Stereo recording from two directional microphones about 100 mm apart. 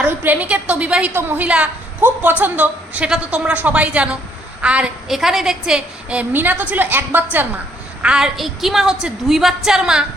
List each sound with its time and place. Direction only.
0.0 s a woman's voice: 20° right (ahead or behind)
8.0 s a woman's voice: 5° right (ahead or behind)